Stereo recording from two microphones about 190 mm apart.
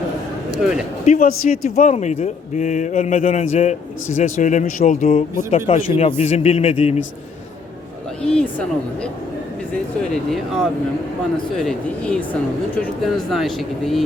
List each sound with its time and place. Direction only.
0.6 s speech: 5° right (ahead or behind)
1.0 s speech: 45° left (ahead or behind)
8.2 s speech: 5° left (ahead or behind)
10.3 s speech: centre (ahead or behind)